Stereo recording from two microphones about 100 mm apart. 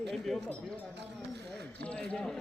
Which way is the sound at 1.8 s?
10° left (ahead or behind).